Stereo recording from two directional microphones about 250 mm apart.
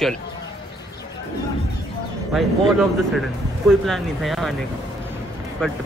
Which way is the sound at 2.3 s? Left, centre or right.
Centre.